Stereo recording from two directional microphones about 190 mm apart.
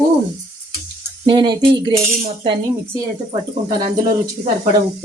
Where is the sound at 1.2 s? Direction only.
25° right (ahead or behind).